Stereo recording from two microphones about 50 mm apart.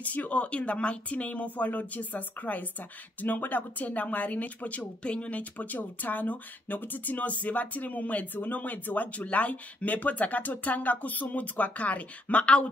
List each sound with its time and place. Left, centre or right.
0.0 s speech: left